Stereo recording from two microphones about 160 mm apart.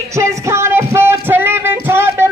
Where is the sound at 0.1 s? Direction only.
20° right (ahead or behind).